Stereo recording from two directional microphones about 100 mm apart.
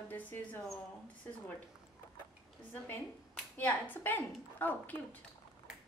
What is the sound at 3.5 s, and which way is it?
Speech, 20° left (ahead or behind).